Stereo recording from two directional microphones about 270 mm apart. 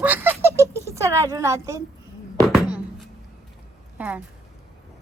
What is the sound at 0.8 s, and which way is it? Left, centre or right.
Speech, centre.